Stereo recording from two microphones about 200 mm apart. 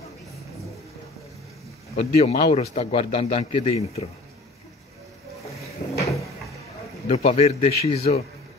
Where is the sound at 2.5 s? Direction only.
30° left (ahead or behind).